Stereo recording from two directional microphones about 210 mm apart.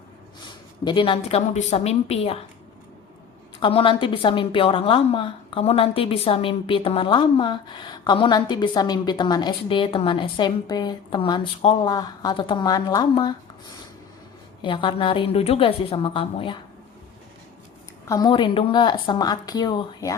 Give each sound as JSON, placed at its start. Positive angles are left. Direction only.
{"t": 0.9, "sound": "a woman's voice", "side_deg": 25}
{"t": 3.6, "sound": "a woman's voice", "side_deg": 25}
{"t": 14.6, "sound": "a woman's voice", "side_deg": 25}
{"t": 18.1, "sound": "a woman's voice", "side_deg": 20}